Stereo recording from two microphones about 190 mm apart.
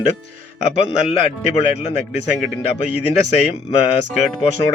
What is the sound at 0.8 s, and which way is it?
Speech, 30° left (ahead or behind).